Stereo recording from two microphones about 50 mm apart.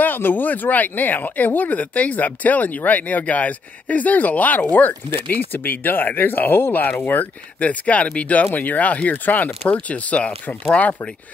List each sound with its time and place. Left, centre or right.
0.0 s speech: left
7.6 s speech: left